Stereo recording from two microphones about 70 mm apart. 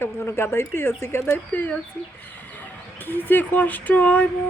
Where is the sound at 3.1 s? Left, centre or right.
Left.